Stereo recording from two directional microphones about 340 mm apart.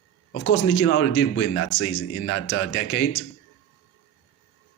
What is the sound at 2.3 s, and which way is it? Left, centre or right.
Speech, left.